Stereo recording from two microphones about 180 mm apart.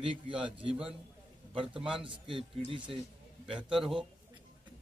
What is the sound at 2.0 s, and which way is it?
Speech, 30° right (ahead or behind).